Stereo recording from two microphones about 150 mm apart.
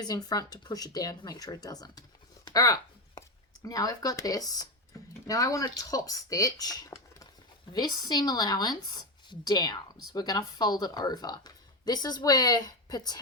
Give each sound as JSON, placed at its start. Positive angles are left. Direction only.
{"t": 0.0, "sound": "speech", "side_deg": 25}